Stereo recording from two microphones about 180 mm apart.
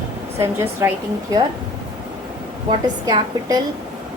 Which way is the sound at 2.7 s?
25° right (ahead or behind).